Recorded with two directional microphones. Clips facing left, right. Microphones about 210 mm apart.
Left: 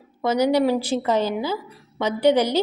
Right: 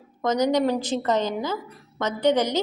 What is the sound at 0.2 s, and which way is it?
A woman's voice, 10° left (ahead or behind).